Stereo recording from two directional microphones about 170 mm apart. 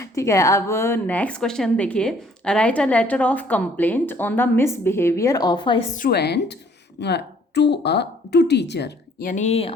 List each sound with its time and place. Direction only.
0.0 s a woman's voice: 20° left (ahead or behind)
5.9 s a woman's voice: 60° left (ahead or behind)
7.0 s a woman's voice: 85° left
9.2 s speech: 45° left (ahead or behind)